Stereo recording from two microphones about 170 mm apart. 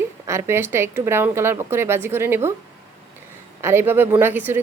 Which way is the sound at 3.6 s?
15° right (ahead or behind).